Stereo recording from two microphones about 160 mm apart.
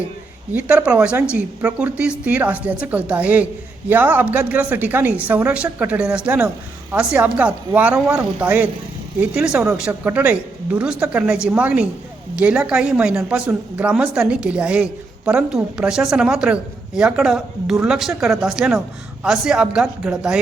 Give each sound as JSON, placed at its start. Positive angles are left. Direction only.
{"t": 0.5, "sound": "a woman's voice", "side_deg": -5}